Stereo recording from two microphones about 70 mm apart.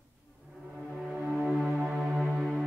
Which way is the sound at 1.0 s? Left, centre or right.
Centre.